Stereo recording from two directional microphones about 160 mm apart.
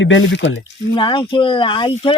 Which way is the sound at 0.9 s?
30° left (ahead or behind).